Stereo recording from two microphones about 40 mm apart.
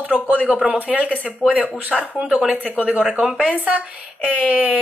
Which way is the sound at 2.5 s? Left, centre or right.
Right.